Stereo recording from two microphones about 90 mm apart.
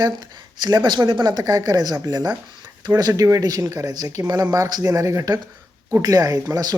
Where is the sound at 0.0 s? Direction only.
50° right (ahead or behind).